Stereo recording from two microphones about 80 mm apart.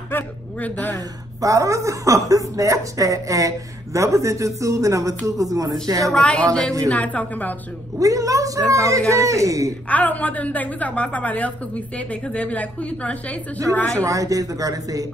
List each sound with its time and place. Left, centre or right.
0.1 s a woman's voice: centre
0.9 s a woman's voice: right
6.9 s a woman's voice: centre
8.0 s a woman's voice: right
9.8 s a woman's voice: centre
14.0 s a woman's voice: right